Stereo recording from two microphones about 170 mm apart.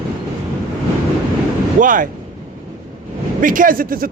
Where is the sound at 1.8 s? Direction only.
50° right (ahead or behind).